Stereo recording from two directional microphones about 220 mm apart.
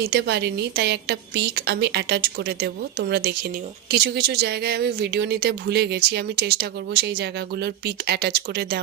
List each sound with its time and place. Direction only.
0.0 s speech: 50° right (ahead or behind)